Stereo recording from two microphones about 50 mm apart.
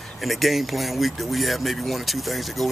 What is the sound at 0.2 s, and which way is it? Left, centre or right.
Speech, centre.